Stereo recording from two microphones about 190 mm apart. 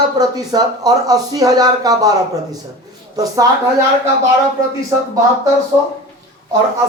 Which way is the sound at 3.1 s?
20° right (ahead or behind).